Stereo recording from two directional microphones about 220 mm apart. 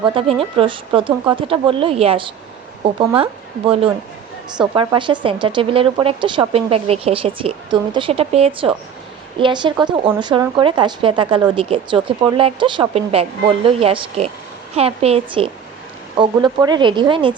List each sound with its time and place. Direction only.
0.0 s speech: 25° right (ahead or behind)
4.5 s speech: 20° right (ahead or behind)